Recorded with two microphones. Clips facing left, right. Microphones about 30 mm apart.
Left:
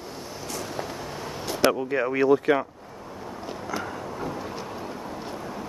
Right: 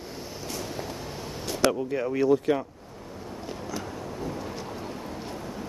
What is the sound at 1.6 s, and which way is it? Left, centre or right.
Speech, left.